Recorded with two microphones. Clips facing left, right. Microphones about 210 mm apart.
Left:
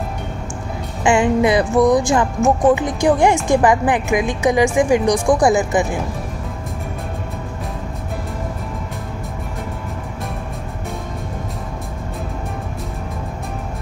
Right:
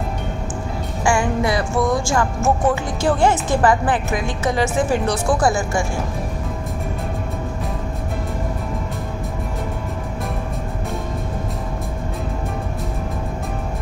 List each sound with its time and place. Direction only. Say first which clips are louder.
1.0 s music: left 5 dB; 20° left (ahead or behind)